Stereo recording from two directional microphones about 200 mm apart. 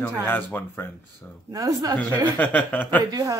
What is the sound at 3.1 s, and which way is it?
Speech, 15° right (ahead or behind).